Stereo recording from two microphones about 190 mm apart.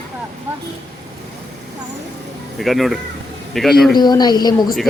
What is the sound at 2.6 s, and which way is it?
A man's voice, centre (ahead or behind).